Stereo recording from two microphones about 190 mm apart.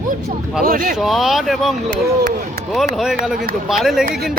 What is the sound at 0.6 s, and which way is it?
Speech, 45° right (ahead or behind).